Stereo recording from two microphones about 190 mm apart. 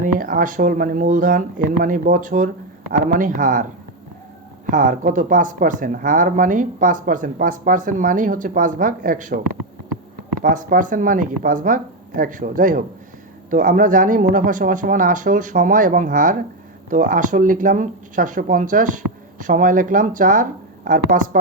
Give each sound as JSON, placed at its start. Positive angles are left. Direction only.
{"t": 0.0, "sound": "speech", "side_deg": -45}
{"t": 4.7, "sound": "speech", "side_deg": -45}
{"t": 10.4, "sound": "speech", "side_deg": -45}